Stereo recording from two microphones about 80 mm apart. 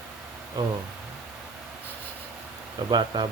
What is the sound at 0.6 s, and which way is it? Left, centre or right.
Speech, right.